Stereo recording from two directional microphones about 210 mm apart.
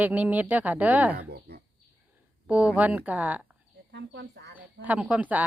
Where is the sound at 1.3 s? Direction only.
50° right (ahead or behind).